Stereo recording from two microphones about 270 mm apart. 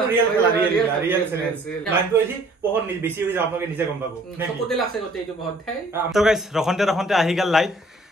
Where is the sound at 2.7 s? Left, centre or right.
Centre.